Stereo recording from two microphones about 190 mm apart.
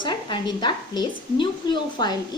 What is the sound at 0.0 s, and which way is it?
Speech, 25° left (ahead or behind).